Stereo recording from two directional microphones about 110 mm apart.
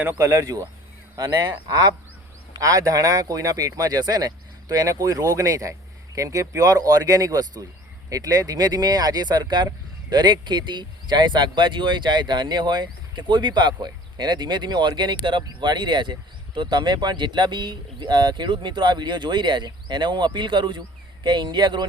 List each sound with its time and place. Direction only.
0.0 s speech: 15° right (ahead or behind)
0.3 s speech: 30° right (ahead or behind)